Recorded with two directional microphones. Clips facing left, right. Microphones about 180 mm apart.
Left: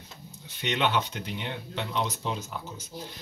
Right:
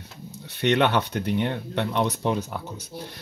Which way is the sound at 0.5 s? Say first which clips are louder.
Right 7 dB; 65° right (ahead or behind).